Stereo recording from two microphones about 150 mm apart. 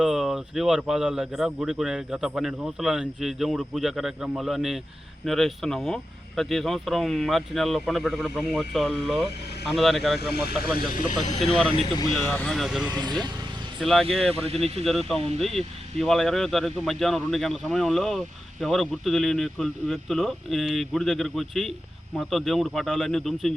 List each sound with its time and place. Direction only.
0.0 s speech: centre (ahead or behind)
10.2 s speech: 90° left; by 11.3 s 65° left (ahead or behind)
12.1 s speech: 15° left (ahead or behind)
12.5 s speech: centre (ahead or behind)
12.9 s speech: 25° right (ahead or behind)
13.8 s speech: centre (ahead or behind)